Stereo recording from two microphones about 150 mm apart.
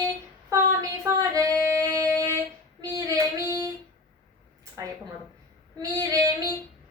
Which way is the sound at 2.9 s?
25° right (ahead or behind).